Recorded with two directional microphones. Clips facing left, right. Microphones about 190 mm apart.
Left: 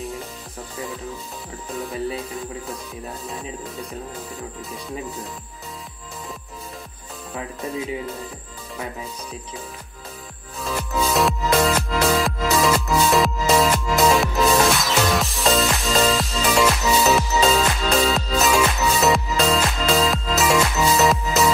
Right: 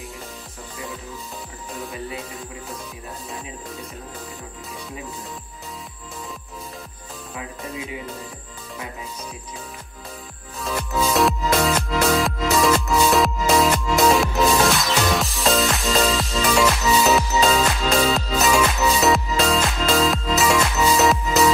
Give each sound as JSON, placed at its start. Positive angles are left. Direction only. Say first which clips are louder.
{"t": 10.6, "sound": "music", "louder": "even", "side_deg": 0}